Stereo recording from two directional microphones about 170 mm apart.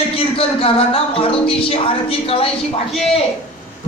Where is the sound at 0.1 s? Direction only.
35° left (ahead or behind).